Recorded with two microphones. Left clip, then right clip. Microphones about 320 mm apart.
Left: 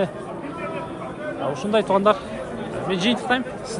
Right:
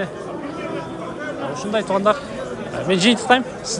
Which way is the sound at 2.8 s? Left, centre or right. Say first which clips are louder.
Right 6 dB; centre.